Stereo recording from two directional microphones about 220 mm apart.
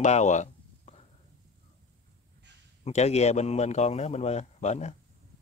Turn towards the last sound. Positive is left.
turn(degrees=30)  # may be behind; listen again after turning